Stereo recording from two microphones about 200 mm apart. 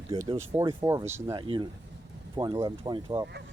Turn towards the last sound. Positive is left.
turn(degrees=-20)  # may be behind; listen again after turning